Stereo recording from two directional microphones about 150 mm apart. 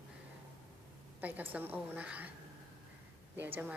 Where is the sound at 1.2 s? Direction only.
10° right (ahead or behind).